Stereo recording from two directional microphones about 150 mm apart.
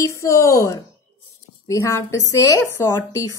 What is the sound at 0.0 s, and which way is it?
A woman's voice, 20° left (ahead or behind).